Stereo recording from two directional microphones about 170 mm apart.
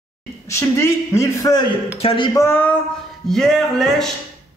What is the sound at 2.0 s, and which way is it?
Speech, 30° left (ahead or behind).